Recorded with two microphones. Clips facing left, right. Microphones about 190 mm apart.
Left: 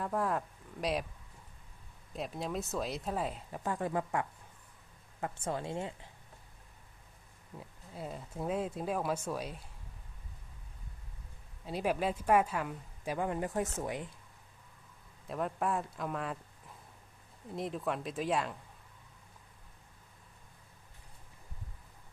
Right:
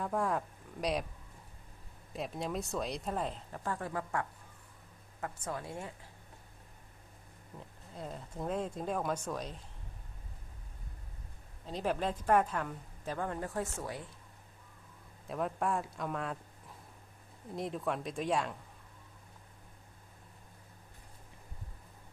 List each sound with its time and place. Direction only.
0.0 s speech: centre (ahead or behind)
2.1 s speech: centre (ahead or behind)
3.6 s speech: 20° left (ahead or behind)
7.6 s speech: 5° left (ahead or behind)
11.6 s a woman's voice: 10° left (ahead or behind)
15.3 s speech: centre (ahead or behind)
17.5 s speech: centre (ahead or behind)